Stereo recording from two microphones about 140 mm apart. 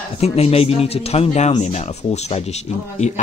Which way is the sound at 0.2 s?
45° left (ahead or behind).